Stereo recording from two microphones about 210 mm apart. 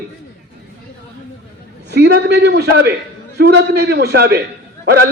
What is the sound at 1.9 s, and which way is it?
A man's voice, 55° right (ahead or behind).